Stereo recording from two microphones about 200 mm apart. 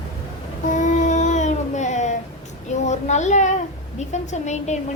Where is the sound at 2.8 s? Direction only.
35° left (ahead or behind).